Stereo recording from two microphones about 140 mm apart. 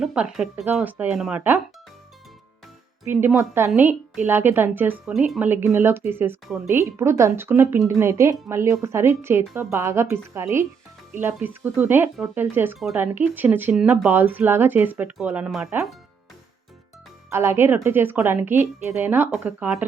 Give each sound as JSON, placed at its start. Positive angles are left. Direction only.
{"t": 0.0, "sound": "speech", "side_deg": -5}
{"t": 3.0, "sound": "a woman's voice", "side_deg": -15}
{"t": 17.2, "sound": "a woman's voice", "side_deg": -20}